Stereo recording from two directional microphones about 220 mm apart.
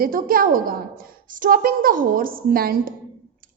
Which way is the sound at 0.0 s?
40° right (ahead or behind).